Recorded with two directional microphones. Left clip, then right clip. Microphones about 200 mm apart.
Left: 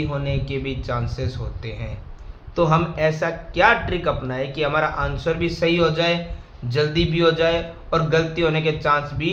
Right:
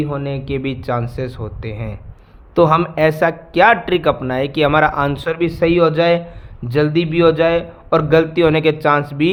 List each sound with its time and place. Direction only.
0.1 s speech: 50° right (ahead or behind)